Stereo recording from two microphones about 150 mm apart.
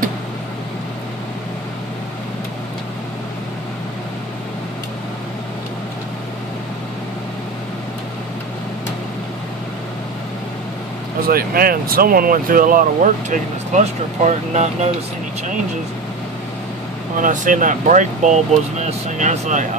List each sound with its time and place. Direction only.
11.2 s speech: 80° right; by 14.7 s 50° right (ahead or behind)
17.2 s speech: 60° right (ahead or behind)